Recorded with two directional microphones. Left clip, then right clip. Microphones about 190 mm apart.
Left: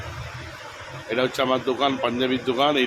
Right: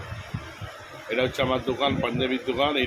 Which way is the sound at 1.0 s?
20° left (ahead or behind).